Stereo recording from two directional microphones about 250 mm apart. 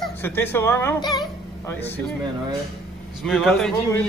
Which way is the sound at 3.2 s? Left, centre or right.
Centre.